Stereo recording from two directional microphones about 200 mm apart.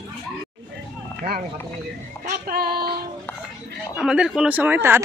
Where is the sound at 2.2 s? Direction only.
50° right (ahead or behind).